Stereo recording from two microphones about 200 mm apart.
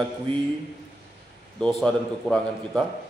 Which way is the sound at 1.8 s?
5° left (ahead or behind).